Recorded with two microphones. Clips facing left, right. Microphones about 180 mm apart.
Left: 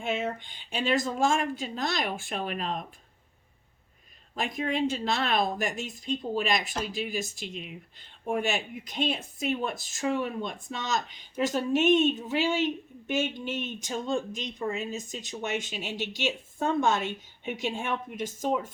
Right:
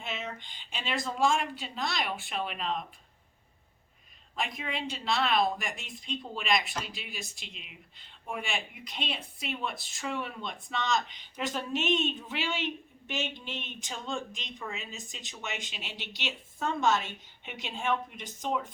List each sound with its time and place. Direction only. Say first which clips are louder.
0.0 s speech: left 8 dB; 50° left (ahead or behind)
4.4 s speech: left 13 dB; 45° left (ahead or behind)